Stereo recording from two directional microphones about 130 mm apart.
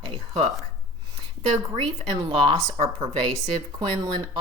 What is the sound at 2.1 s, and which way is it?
Speech, 30° right (ahead or behind).